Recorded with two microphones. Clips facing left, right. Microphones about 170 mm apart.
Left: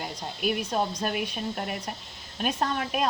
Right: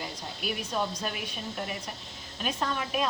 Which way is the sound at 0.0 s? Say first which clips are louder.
Left 6 dB; 50° left (ahead or behind).